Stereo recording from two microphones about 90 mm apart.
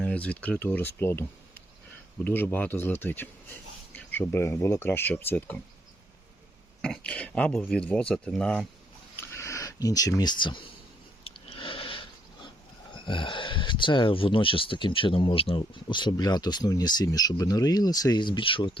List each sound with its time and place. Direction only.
0.0 s a man's voice: 15° left (ahead or behind); by 4.9 s 30° left (ahead or behind)
4.9 s speech: 20° left (ahead or behind)
6.8 s speech: 10° left (ahead or behind)
9.1 s a sound: 30° left (ahead or behind); by 10.6 s 55° left (ahead or behind)
11.2 s a sound: 90° left
12.9 s speech: 65° left (ahead or behind); by 18.2 s 45° left (ahead or behind)
18.2 s speech: 65° left (ahead or behind)